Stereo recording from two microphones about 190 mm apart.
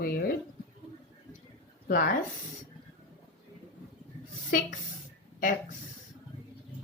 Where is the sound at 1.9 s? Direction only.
50° left (ahead or behind).